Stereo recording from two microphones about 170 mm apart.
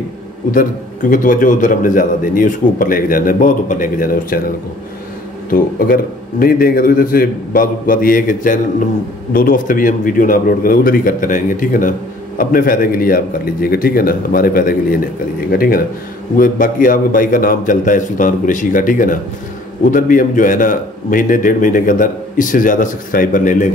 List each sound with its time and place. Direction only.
1.1 s a man's voice: 50° left (ahead or behind)
5.5 s a man's voice: 55° left (ahead or behind)